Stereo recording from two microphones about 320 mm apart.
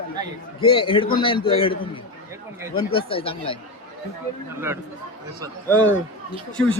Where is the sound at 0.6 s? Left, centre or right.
Centre.